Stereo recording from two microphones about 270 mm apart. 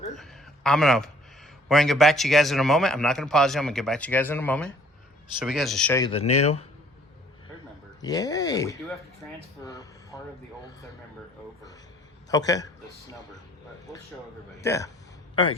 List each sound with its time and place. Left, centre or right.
0.2 s speech: centre
6.4 s a man's voice: left
8.0 s speech: centre
12.3 s speech: centre
14.6 s speech: centre